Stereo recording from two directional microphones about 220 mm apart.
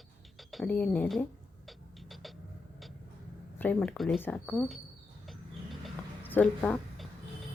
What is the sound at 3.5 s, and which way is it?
Speech, 5° left (ahead or behind).